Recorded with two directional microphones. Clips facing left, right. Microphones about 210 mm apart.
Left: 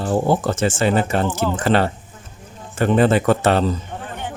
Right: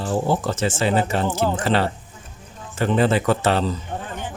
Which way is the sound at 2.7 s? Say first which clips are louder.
Left 3 dB; 50° left (ahead or behind).